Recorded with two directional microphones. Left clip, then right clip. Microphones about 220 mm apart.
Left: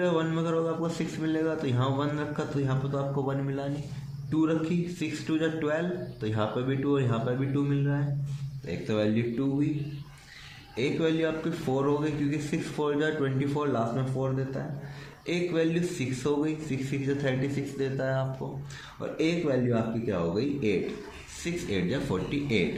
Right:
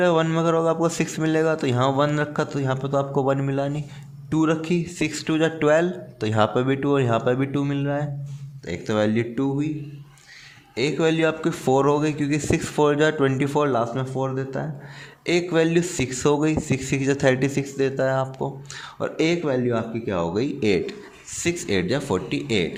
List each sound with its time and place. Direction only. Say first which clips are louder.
0.0 s a man's voice: right 8 dB; 50° right (ahead or behind)
4.3 s a man's voice: right 6 dB; 50° right (ahead or behind)
10.8 s a man's voice: right 6 dB; 50° right (ahead or behind)
18.9 s a man's voice: right 6 dB; 50° right (ahead or behind)